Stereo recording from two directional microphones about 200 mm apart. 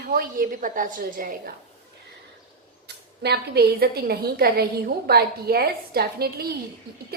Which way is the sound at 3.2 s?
50° right (ahead or behind).